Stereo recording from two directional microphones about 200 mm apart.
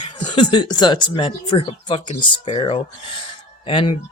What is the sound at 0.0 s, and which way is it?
Speech, 20° left (ahead or behind).